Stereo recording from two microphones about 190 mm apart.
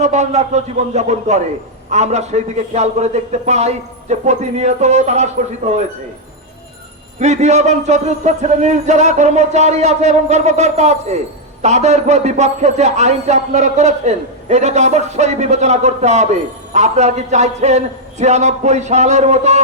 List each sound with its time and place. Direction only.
0.0 s a man's voice: 35° right (ahead or behind)
7.2 s a man's voice: 35° right (ahead or behind)